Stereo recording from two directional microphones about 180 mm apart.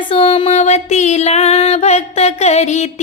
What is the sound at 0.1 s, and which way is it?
Female singing, 30° left (ahead or behind).